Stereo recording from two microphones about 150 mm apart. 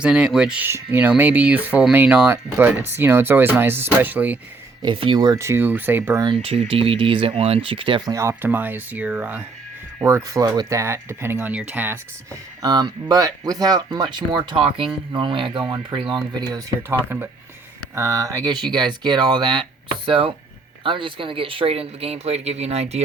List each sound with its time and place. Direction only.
0.0 s speech: 5° right (ahead or behind)
4.8 s speech: 35° right (ahead or behind); by 6.2 s 15° right (ahead or behind)
6.2 s speech: 35° right (ahead or behind)
8.1 s speech: 20° right (ahead or behind)
10.0 s speech: 20° right (ahead or behind)
12.6 s speech: 25° right (ahead or behind); by 23.0 s 45° right (ahead or behind)